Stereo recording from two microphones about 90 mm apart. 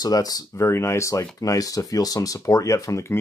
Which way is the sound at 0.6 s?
30° left (ahead or behind).